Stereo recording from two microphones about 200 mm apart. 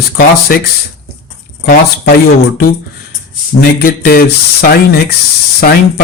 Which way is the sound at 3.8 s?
45° left (ahead or behind).